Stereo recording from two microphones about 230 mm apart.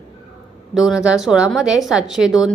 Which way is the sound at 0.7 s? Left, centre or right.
Centre.